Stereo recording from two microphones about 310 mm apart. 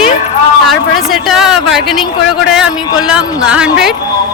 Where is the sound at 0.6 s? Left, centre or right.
Centre.